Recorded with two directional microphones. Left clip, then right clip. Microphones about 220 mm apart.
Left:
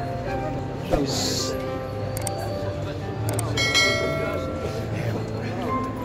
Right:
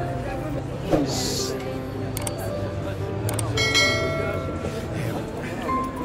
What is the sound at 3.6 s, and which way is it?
Bell, centre (ahead or behind).